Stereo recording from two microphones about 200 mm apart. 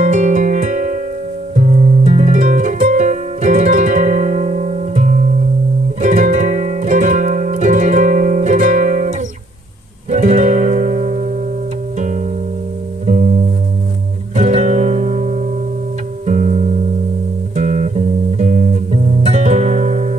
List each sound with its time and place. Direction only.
0.0 s music: 40° right (ahead or behind)
2.0 s music: 35° right (ahead or behind)
13.0 s music: 40° right (ahead or behind)